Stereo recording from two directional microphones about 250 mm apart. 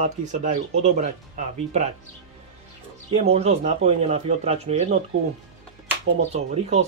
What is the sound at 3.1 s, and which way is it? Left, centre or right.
Speech, right.